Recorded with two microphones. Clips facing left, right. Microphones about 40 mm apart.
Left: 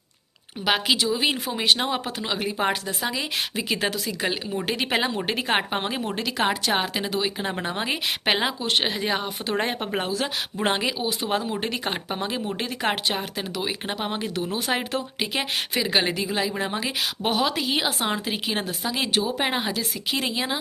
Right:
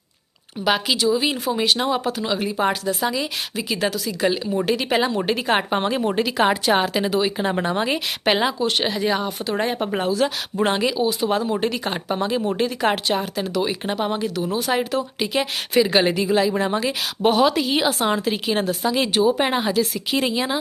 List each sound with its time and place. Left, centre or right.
0.6 s speech: left
3.5 s a woman's voice: left
4.2 s speech: centre
5.7 s a woman's voice: centre
6.1 s a woman's voice: centre
7.6 s a woman's voice: centre
8.2 s speech: centre; by 9.7 s left
10.7 s speech: centre
15.7 s a woman's voice: centre